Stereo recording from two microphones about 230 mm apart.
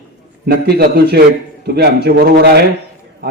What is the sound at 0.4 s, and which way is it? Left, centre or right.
A man's voice, right.